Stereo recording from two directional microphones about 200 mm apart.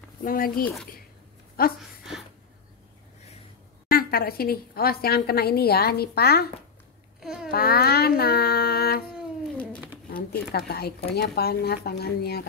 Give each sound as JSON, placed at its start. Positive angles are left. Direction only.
{"t": 0.2, "sound": "a woman's voice", "side_deg": 45}
{"t": 1.8, "sound": "speech", "side_deg": 0}
{"t": 3.9, "sound": "a woman's voice", "side_deg": 50}
{"t": 7.2, "sound": "babbling", "side_deg": 0}
{"t": 7.5, "sound": "child singing", "side_deg": 50}
{"t": 10.1, "sound": "a woman's voice", "side_deg": 50}